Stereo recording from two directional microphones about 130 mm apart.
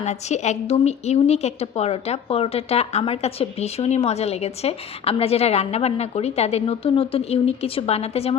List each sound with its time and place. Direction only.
0.0 s a woman's voice: 60° left (ahead or behind)